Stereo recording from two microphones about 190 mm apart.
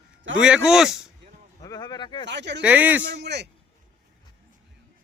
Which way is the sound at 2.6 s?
10° right (ahead or behind).